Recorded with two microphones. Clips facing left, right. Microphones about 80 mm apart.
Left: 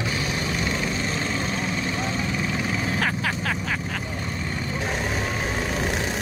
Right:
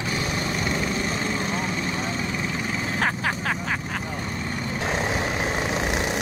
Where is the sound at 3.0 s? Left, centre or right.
Right.